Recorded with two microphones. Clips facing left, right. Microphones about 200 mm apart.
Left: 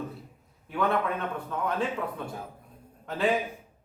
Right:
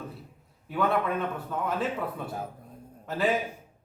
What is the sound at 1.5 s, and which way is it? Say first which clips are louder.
Speech: left 3 dB; 5° right (ahead or behind).